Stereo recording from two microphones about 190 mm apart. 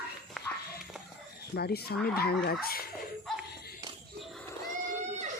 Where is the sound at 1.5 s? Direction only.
55° left (ahead or behind).